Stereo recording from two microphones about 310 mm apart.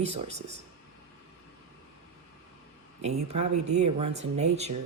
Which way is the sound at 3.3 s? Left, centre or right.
Right.